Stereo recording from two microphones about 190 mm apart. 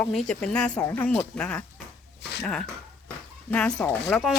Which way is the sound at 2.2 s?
60° left (ahead or behind).